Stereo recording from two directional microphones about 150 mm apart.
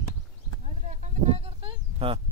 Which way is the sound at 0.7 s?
50° right (ahead or behind).